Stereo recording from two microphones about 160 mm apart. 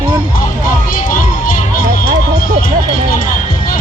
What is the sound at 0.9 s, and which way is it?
Music, 60° left (ahead or behind).